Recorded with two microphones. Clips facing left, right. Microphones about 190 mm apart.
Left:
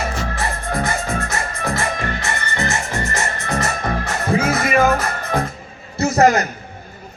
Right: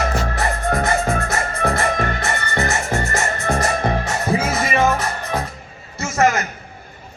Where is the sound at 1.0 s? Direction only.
55° right (ahead or behind).